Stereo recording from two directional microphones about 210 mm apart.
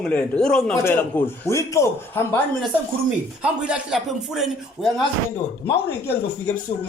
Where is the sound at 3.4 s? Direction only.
5° right (ahead or behind).